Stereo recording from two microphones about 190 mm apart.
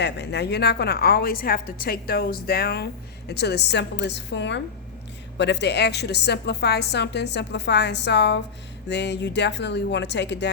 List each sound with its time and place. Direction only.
0.0 s a woman's voice: 65° left (ahead or behind)